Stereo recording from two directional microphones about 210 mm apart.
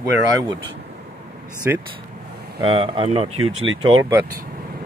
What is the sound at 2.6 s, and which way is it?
Speech, 25° right (ahead or behind).